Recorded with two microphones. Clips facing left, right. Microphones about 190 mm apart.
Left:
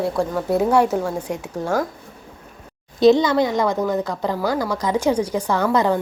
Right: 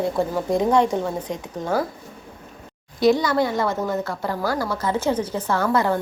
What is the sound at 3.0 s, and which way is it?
A woman's voice, 20° left (ahead or behind).